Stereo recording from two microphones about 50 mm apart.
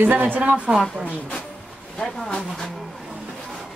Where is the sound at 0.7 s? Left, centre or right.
Right.